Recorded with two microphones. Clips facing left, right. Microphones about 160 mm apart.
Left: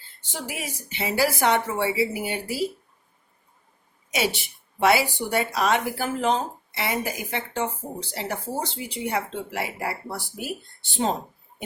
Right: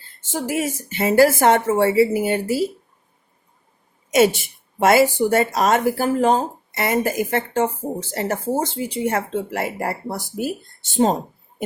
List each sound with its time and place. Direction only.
0.2 s a woman's voice: 45° right (ahead or behind)
4.1 s a woman's voice: 45° right (ahead or behind)